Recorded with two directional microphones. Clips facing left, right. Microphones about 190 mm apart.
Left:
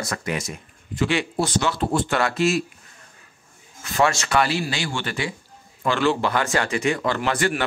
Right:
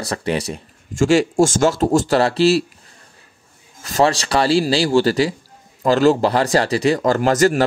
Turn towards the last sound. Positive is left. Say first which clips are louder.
# right 8 dB
turn(degrees=-40)  # may be behind; listen again after turning